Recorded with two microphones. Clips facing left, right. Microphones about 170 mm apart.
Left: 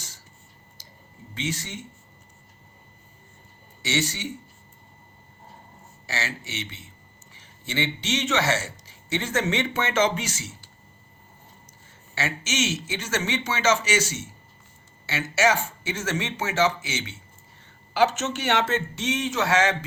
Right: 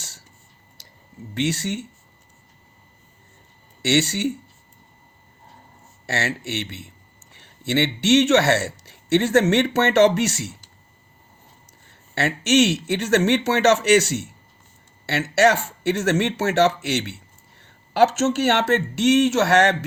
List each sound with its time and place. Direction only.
0.8 s a sound: 70° right (ahead or behind)
1.3 s speech: 70° right (ahead or behind)
3.8 s speech: 65° right (ahead or behind)
6.1 s a man's voice: 65° right (ahead or behind)
12.1 s speech: 65° right (ahead or behind)